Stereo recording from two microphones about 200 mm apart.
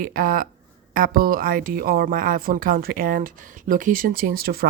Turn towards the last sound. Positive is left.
turn(degrees=-50)  # may be behind; listen again after turning